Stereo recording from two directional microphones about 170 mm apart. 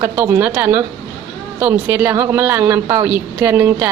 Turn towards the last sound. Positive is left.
turn(degrees=-15)  # may be behind; listen again after turning